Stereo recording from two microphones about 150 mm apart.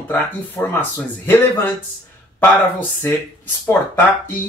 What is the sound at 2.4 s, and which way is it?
Speech, 15° left (ahead or behind).